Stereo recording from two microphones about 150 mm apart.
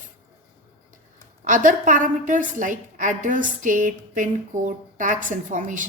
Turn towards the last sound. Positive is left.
turn(degrees=-60)  # may be behind; listen again after turning